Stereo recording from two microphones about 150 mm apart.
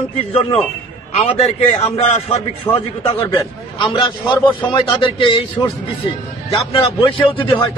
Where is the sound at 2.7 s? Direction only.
25° left (ahead or behind).